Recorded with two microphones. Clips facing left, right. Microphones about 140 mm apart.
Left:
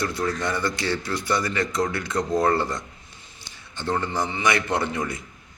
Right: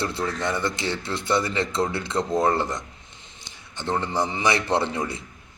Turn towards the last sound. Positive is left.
turn(degrees=-25)  # may be behind; listen again after turning